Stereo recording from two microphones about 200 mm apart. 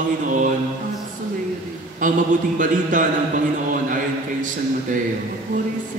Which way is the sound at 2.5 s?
40° right (ahead or behind).